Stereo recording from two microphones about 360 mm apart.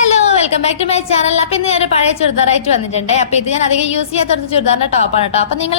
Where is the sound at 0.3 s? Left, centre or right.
Centre.